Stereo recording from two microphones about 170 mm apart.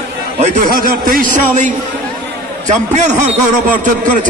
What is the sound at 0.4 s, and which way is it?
A man's voice, 55° right (ahead or behind).